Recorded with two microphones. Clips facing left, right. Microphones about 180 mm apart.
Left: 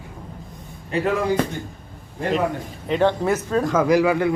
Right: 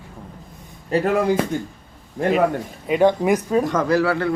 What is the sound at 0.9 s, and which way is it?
Speech, 35° right (ahead or behind).